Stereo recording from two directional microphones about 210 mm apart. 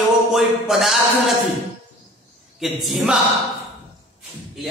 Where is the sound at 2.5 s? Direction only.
Centre (ahead or behind).